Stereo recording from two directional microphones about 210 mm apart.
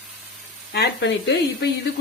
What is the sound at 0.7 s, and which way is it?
Speech, 55° left (ahead or behind).